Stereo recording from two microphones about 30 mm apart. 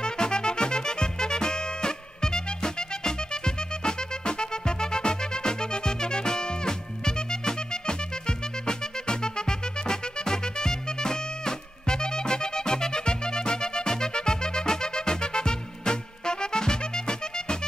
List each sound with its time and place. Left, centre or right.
0.0 s music: left